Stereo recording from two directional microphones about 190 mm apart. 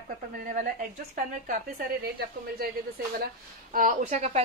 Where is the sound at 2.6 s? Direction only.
55° right (ahead or behind).